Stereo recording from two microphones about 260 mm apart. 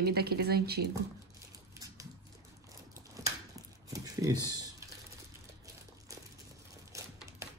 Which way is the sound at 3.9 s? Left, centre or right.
Centre.